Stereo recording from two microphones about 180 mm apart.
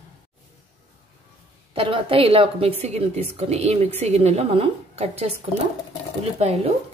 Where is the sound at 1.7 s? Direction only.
30° right (ahead or behind).